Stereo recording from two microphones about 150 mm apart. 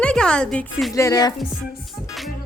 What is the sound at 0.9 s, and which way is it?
Music, 20° left (ahead or behind).